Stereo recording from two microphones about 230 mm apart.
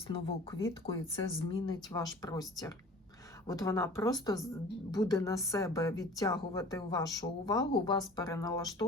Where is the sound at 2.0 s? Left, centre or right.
Centre.